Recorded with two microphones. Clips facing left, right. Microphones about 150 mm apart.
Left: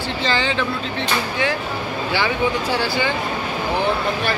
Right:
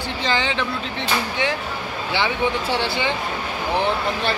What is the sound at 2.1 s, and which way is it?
Speech, 25° right (ahead or behind).